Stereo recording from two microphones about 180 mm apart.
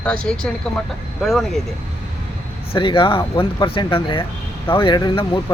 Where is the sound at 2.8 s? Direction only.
25° left (ahead or behind).